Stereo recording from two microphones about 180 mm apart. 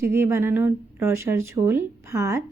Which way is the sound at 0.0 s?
15° right (ahead or behind).